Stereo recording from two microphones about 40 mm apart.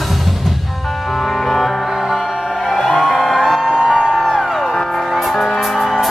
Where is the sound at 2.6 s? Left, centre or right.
Centre.